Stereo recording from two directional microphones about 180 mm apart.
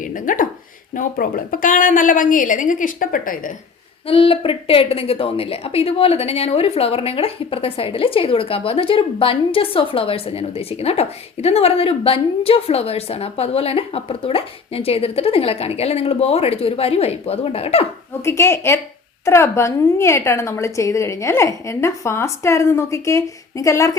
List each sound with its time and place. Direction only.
0.0 s a sound: 50° left (ahead or behind)
0.9 s a woman's voice: 50° left (ahead or behind)
4.0 s a woman's voice: 30° left (ahead or behind)
18.2 s a woman's voice: 15° left (ahead or behind)